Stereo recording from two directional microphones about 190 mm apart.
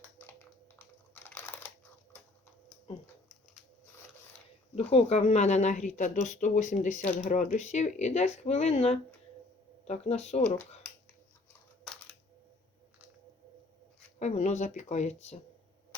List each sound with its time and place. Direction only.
0.2 s a sound: 10° left (ahead or behind)
1.1 s typing: 10° left (ahead or behind)
4.7 s speech: 35° left (ahead or behind)
14.2 s speech: 35° left (ahead or behind)